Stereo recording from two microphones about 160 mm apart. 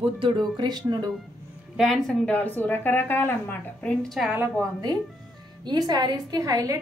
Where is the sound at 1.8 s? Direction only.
Centre (ahead or behind).